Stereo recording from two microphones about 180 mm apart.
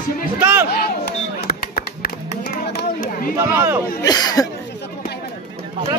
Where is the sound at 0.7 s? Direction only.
60° left (ahead or behind).